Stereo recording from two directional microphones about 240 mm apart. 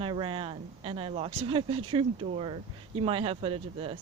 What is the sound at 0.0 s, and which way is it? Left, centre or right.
Speech, right.